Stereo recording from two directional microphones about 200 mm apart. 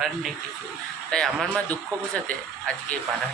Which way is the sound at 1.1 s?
5° left (ahead or behind).